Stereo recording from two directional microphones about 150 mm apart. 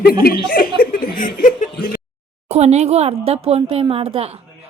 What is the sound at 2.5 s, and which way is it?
A woman's voice, 45° right (ahead or behind).